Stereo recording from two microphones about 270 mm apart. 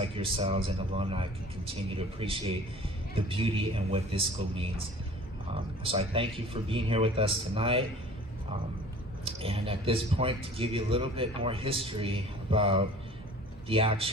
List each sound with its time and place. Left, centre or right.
0.0 s speech: right
5.9 s speech: centre
9.2 s speech: right